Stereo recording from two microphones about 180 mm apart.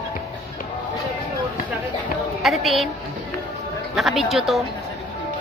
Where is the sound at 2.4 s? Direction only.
Centre (ahead or behind).